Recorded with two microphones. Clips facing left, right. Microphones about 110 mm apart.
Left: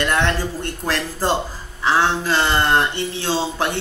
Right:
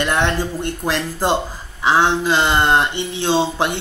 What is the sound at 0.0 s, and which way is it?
Speech, 20° right (ahead or behind).